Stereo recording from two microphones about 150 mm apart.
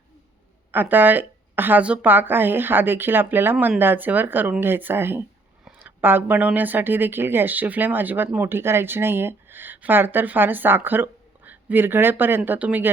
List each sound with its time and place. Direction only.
0.7 s speech: 10° right (ahead or behind)